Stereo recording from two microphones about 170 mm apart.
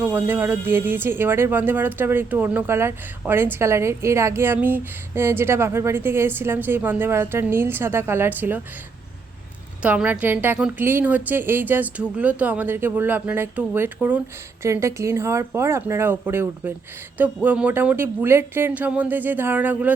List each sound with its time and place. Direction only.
0.0 s speech: 10° right (ahead or behind)
9.8 s speech: 10° right (ahead or behind)